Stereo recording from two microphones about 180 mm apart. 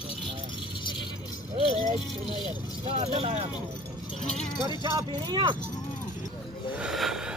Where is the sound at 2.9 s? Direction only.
35° right (ahead or behind).